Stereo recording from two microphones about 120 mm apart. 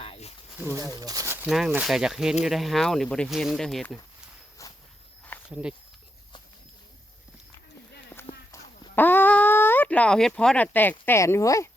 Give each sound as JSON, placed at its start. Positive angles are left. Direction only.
{"t": 0.0, "sound": "a sound", "side_deg": 55}
{"t": 0.6, "sound": "speech", "side_deg": -20}
{"t": 0.9, "sound": "speech", "side_deg": -30}
{"t": 1.5, "sound": "speech", "side_deg": 0}
{"t": 4.6, "sound": "walk", "side_deg": 25}
{"t": 5.5, "sound": "speech", "side_deg": -10}
{"t": 8.3, "sound": "clip-clop", "side_deg": 35}
{"t": 9.0, "sound": "speech", "side_deg": 15}